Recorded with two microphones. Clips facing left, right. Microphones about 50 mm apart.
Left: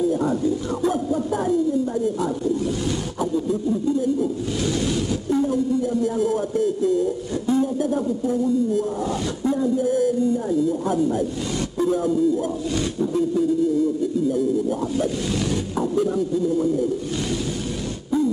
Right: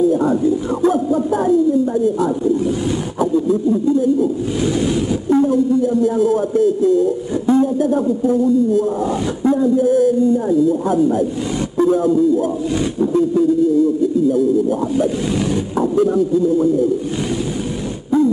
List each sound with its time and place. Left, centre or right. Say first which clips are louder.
0.1 s speech: right 6 dB; centre
3.2 s speech: right 8 dB; right
4.7 s a sound: right 6 dB; right
6.0 s speech: right 6 dB; centre
10.7 s speech: right 6 dB; centre